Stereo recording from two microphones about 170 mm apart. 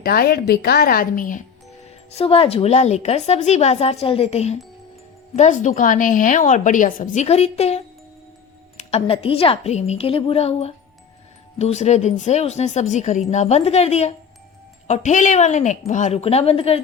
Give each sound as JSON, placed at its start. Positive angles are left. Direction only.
{"t": 0.0, "sound": "a woman's voice", "side_deg": 65}
{"t": 2.1, "sound": "a woman's voice", "side_deg": 35}
{"t": 8.8, "sound": "a woman's voice", "side_deg": 35}